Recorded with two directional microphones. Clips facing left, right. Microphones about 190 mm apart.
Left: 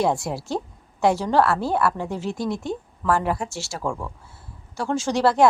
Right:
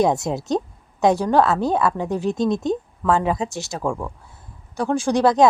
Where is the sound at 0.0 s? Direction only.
20° right (ahead or behind).